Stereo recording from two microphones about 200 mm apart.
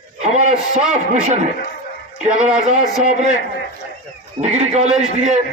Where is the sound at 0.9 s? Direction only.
35° right (ahead or behind).